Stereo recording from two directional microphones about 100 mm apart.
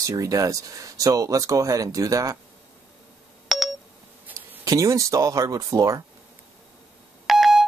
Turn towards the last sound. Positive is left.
turn(degrees=0)  # may be behind; listen again after turning